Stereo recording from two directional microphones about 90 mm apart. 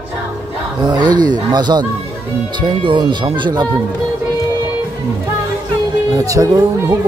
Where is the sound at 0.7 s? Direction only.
50° right (ahead or behind).